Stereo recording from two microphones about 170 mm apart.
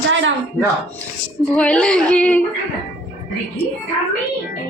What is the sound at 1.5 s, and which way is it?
Speech, 5° left (ahead or behind).